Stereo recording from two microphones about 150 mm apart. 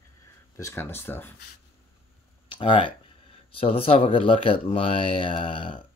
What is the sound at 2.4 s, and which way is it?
Speech, 35° left (ahead or behind).